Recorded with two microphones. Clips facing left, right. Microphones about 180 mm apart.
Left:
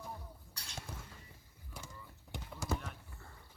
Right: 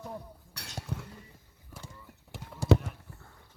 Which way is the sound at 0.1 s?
65° right (ahead or behind).